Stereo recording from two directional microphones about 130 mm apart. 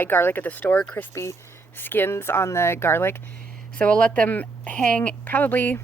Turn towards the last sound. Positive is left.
turn(degrees=15)  # may be behind; listen again after turning